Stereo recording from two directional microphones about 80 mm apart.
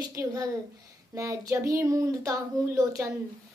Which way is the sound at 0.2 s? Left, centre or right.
Right.